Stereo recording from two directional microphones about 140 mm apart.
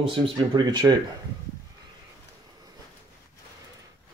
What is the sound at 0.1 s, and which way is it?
Speech, 35° right (ahead or behind).